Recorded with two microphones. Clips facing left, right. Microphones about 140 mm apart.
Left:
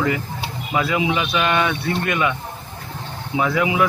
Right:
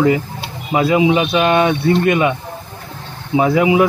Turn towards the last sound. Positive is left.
turn(degrees=-25)  # may be behind; listen again after turning